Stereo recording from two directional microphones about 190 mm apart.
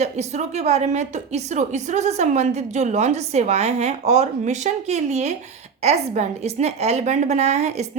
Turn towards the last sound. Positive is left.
turn(degrees=-35)  # may be behind; listen again after turning